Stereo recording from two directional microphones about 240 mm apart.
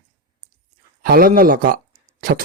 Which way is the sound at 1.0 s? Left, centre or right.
Right.